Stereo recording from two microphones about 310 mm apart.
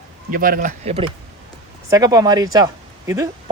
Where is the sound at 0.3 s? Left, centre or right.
Right.